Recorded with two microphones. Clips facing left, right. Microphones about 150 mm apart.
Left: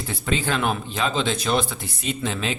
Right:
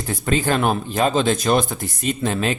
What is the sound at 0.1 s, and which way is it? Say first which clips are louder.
Speech: right 5 dB; 45° right (ahead or behind).